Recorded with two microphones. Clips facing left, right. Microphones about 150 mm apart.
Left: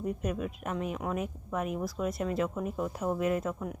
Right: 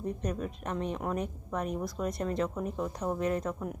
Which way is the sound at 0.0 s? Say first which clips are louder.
Left 1 dB; 5° left (ahead or behind).